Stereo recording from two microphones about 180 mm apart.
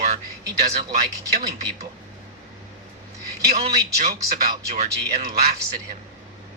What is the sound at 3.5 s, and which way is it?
Speech, 35° right (ahead or behind).